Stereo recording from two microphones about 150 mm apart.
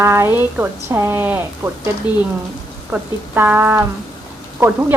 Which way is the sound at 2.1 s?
30° left (ahead or behind).